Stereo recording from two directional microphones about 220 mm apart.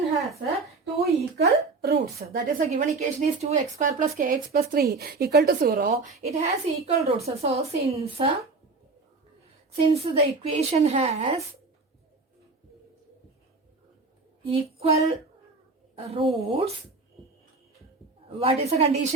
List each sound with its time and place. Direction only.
1.2 s a woman's voice: 45° right (ahead or behind); by 8.4 s 25° right (ahead or behind)
9.7 s a woman's voice: 25° right (ahead or behind)
14.4 s a woman's voice: 25° right (ahead or behind)
18.3 s a woman's voice: 25° right (ahead or behind)